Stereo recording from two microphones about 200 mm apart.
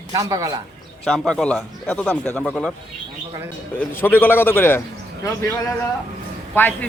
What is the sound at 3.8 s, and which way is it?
A man's voice, 10° left (ahead or behind).